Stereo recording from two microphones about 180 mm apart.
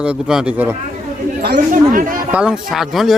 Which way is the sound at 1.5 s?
45° right (ahead or behind).